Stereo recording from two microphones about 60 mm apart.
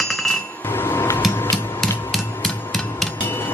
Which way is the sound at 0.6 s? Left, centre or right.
Left.